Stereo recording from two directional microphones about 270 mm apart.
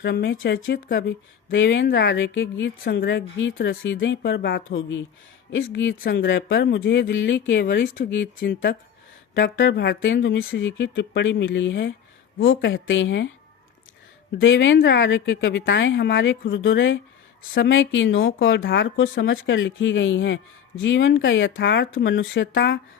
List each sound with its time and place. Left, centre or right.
0.0 s speech: left
14.3 s speech: left